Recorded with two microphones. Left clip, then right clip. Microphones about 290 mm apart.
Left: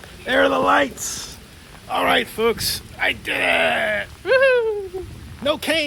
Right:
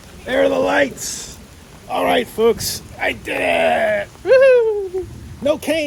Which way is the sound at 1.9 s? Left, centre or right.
Centre.